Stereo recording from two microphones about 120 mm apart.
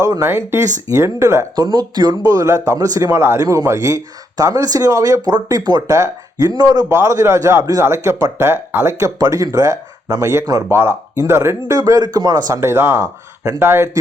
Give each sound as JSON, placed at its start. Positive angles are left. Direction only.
{"t": 0.0, "sound": "speech", "side_deg": -25}
{"t": 1.5, "sound": "speech", "side_deg": -35}